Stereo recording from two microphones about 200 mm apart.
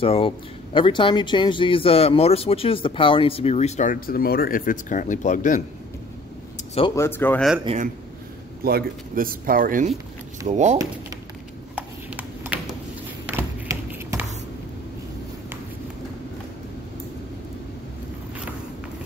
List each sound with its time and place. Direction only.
0.0 s speech: 30° left (ahead or behind)
7.0 s speech: 10° left (ahead or behind)
7.6 s speech: 35° right (ahead or behind)
8.6 s speech: 50° right (ahead or behind)
11.7 s a sound: 5° right (ahead or behind)
13.4 s tap: 10° right (ahead or behind)